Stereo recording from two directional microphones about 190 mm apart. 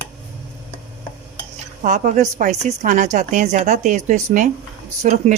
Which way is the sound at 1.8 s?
40° right (ahead or behind).